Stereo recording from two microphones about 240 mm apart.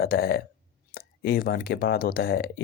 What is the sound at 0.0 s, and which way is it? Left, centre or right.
Speech, left.